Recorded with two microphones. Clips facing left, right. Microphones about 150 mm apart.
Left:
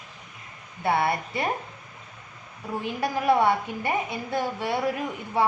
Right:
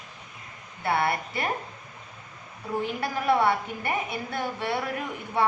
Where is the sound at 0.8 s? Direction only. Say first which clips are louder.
Left 2 dB; 20° left (ahead or behind).